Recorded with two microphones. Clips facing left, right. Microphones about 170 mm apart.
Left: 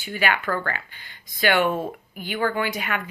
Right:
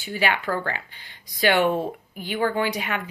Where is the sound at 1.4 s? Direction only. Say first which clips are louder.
Right 1 dB; 35° right (ahead or behind).